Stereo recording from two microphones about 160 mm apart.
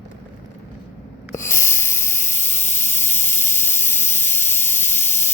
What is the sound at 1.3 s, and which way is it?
Hiss, 15° left (ahead or behind).